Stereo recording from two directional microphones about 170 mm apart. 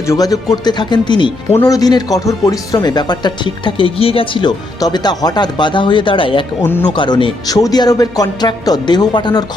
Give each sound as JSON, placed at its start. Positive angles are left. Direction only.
{"t": 0.1, "sound": "speech", "side_deg": 20}